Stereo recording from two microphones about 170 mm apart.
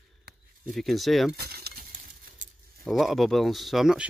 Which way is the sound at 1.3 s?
65° right (ahead or behind).